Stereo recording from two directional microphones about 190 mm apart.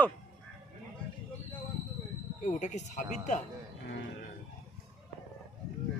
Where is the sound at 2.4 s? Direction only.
40° left (ahead or behind).